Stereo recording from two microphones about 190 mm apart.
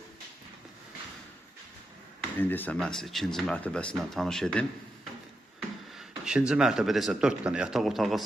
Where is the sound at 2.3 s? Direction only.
10° left (ahead or behind).